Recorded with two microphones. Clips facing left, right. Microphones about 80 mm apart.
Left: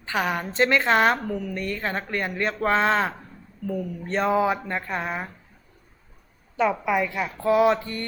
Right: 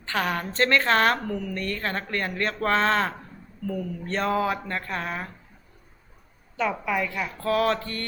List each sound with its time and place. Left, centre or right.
0.0 s a woman's voice: centre
6.6 s a woman's voice: centre